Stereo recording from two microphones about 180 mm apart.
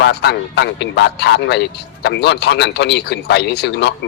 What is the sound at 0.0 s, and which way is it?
Speech, 65° left (ahead or behind).